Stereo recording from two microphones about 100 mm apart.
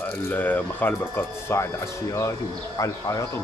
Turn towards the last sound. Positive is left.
turn(degrees=35)  # may be behind; listen again after turning